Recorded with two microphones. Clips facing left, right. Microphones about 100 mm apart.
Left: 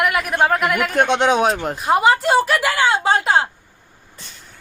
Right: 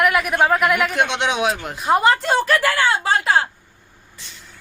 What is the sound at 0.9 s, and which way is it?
Speech, 45° left (ahead or behind).